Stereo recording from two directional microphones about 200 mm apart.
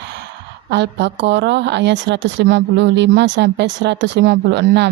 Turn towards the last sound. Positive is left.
turn(degrees=-60)  # may be behind; listen again after turning